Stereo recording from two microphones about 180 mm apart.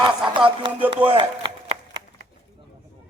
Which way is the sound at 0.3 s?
25° right (ahead or behind).